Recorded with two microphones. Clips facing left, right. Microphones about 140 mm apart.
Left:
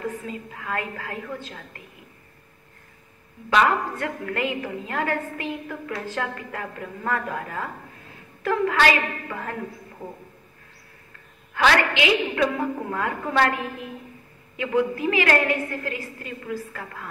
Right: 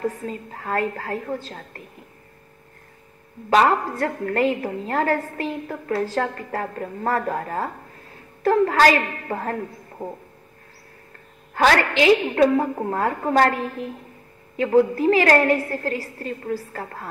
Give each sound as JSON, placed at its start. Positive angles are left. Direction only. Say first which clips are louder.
{"t": 0.0, "sound": "a woman's voice", "louder": "right 4 dB", "side_deg": -35}
{"t": 3.4, "sound": "a woman's voice", "louder": "right 3 dB", "side_deg": -35}
{"t": 11.5, "sound": "a woman's voice", "louder": "right 3 dB", "side_deg": -40}